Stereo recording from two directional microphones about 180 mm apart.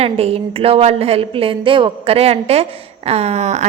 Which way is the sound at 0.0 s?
35° right (ahead or behind).